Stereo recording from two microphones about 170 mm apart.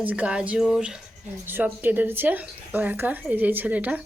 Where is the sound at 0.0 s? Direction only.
10° right (ahead or behind).